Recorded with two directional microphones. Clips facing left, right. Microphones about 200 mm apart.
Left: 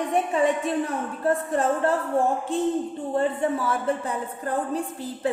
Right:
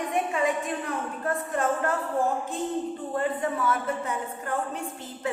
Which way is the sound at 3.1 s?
30° left (ahead or behind).